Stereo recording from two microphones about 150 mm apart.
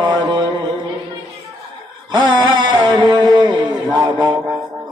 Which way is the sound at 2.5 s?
30° right (ahead or behind).